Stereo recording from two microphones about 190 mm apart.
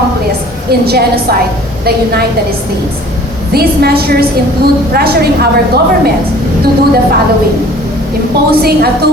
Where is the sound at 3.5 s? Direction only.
55° right (ahead or behind).